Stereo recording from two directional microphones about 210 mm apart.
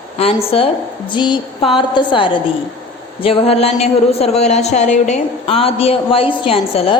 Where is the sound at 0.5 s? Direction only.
25° left (ahead or behind).